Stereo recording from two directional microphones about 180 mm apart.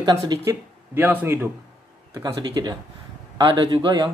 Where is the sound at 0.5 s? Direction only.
15° right (ahead or behind).